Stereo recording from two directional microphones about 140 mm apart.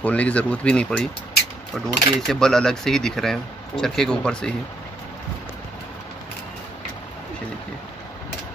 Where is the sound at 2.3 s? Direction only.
5° left (ahead or behind).